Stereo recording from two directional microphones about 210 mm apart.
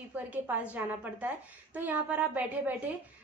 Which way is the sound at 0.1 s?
10° right (ahead or behind).